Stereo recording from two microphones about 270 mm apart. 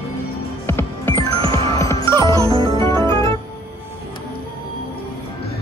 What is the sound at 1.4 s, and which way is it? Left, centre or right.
Music, centre.